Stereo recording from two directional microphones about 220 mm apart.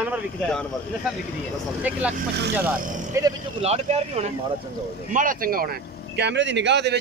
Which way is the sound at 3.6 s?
30° right (ahead or behind).